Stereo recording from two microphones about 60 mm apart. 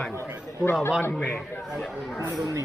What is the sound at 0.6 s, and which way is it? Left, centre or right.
Speech, left.